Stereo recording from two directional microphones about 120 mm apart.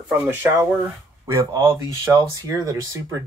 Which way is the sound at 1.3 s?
25° right (ahead or behind).